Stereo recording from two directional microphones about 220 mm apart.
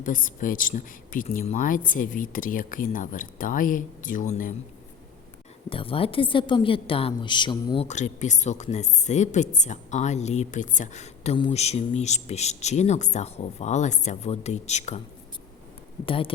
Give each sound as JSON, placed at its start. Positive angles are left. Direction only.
{"t": 0.0, "sound": "a woman's voice", "side_deg": 35}
{"t": 5.6, "sound": "a woman's voice", "side_deg": 25}
{"t": 16.0, "sound": "speech", "side_deg": 25}